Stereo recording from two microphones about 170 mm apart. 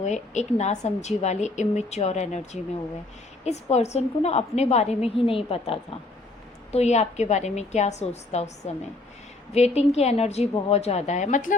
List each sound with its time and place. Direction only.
0.0 s a woman's voice: 45° left (ahead or behind)
9.5 s a woman's voice: 40° left (ahead or behind)